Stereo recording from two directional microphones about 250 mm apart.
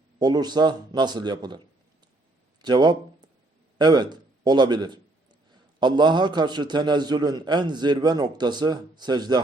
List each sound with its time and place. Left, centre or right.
0.2 s a man's voice: centre
3.8 s a sound: centre
5.8 s a man's voice: centre